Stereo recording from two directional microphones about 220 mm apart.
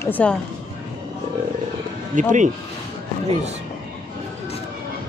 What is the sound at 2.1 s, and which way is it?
Speech, 35° right (ahead or behind).